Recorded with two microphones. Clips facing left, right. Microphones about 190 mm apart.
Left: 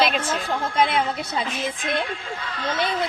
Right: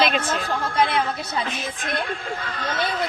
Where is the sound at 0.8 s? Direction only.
20° left (ahead or behind).